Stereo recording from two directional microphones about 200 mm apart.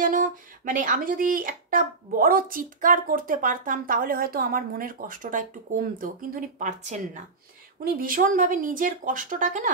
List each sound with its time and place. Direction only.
0.0 s speech: 40° right (ahead or behind)
8.0 s speech: 45° right (ahead or behind)